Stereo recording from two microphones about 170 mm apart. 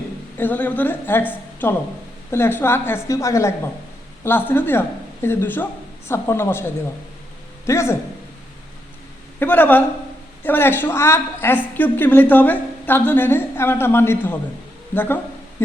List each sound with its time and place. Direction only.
0.3 s a woman's voice: 10° left (ahead or behind)
7.7 s a woman's voice: 15° left (ahead or behind)
9.4 s a woman's voice: 10° left (ahead or behind)